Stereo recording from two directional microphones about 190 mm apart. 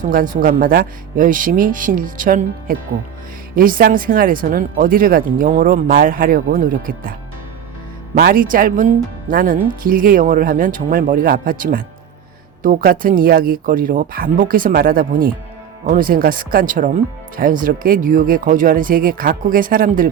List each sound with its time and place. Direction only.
0.0 s speech: 45° right (ahead or behind)
8.2 s speech: 50° right (ahead or behind)